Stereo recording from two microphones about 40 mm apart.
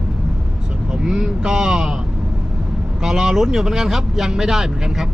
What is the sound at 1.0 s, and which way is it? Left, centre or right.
Speech, centre.